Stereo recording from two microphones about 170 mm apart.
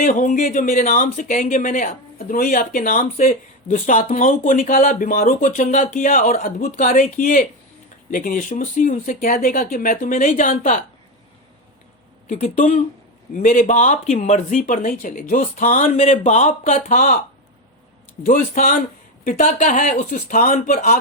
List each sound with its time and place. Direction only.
0.0 s speech: 50° left (ahead or behind)
12.3 s speech: 45° left (ahead or behind)
13.3 s speech: 50° left (ahead or behind)
18.3 s speech: 50° left (ahead or behind)